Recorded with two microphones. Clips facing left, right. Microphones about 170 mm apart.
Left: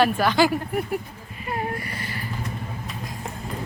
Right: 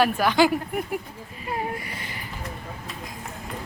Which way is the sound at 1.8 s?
15° right (ahead or behind).